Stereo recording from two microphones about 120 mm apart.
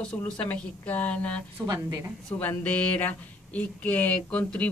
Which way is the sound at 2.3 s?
15° left (ahead or behind).